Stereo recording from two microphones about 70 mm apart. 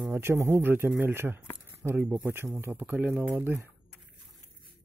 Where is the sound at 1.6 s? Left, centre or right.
Right.